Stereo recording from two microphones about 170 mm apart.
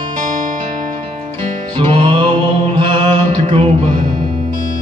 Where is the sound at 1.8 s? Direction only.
30° right (ahead or behind).